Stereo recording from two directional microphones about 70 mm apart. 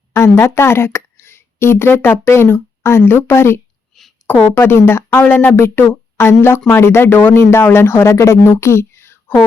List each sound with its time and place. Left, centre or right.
0.3 s speech: left
3.9 s a sound: centre
4.3 s speech: left
5.2 s speech: left